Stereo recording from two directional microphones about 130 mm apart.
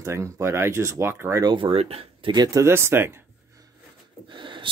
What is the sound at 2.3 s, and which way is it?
Speech, 30° right (ahead or behind).